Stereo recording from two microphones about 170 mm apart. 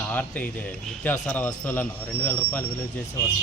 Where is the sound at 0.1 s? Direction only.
10° left (ahead or behind).